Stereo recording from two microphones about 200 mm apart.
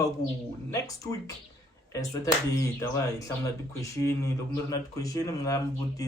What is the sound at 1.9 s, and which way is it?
Speech, 15° left (ahead or behind).